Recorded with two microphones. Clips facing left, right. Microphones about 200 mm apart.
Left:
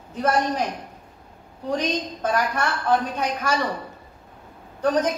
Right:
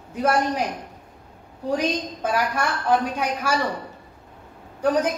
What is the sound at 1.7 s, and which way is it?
A woman's voice, 10° right (ahead or behind).